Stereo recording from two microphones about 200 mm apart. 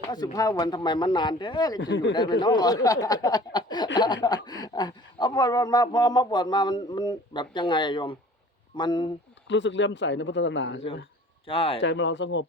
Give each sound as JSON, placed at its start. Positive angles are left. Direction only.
{"t": 0.3, "sound": "speech", "side_deg": 20}
{"t": 1.8, "sound": "speech", "side_deg": 65}
{"t": 2.1, "sound": "speech", "side_deg": 20}
{"t": 9.5, "sound": "speech", "side_deg": 65}
{"t": 11.4, "sound": "speech", "side_deg": 30}
{"t": 11.8, "sound": "speech", "side_deg": 65}